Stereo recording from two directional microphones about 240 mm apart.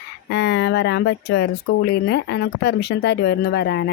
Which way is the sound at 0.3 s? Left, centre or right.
Left.